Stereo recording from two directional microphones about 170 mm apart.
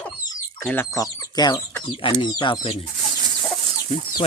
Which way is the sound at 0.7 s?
15° left (ahead or behind).